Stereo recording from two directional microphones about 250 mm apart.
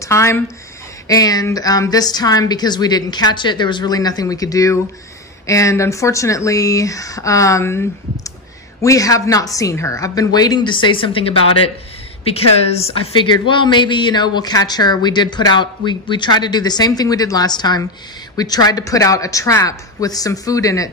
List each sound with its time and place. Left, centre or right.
0.0 s a woman's voice: centre